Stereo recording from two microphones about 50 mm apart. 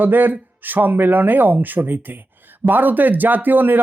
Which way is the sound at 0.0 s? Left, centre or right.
Right.